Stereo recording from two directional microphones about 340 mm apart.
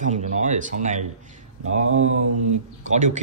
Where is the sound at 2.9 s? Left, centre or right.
Right.